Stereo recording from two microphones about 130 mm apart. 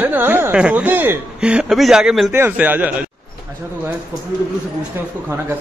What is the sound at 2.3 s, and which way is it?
Speech, 15° right (ahead or behind).